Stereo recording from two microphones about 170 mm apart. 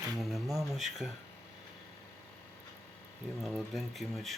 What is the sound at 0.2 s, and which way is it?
Speech, centre (ahead or behind).